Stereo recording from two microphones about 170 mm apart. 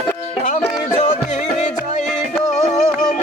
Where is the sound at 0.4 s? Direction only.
45° left (ahead or behind).